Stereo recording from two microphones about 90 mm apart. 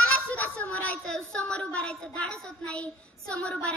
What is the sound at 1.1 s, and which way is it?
Speech, 10° left (ahead or behind).